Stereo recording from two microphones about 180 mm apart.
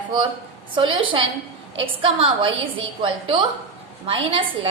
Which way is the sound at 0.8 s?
25° right (ahead or behind).